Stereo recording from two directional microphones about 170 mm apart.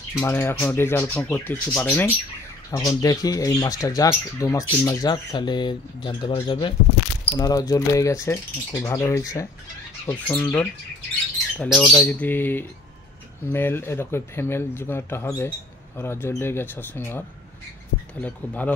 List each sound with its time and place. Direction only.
0.1 s speech: 15° left (ahead or behind)
12.0 s speech: 10° left (ahead or behind)
18.2 s speech: 10° left (ahead or behind)